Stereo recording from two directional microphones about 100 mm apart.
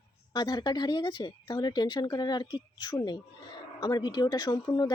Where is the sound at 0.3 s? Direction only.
45° left (ahead or behind).